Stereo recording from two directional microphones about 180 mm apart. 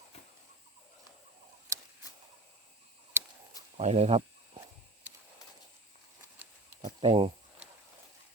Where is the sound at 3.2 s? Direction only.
15° right (ahead or behind).